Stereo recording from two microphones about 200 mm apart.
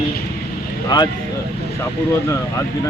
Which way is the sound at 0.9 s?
20° left (ahead or behind).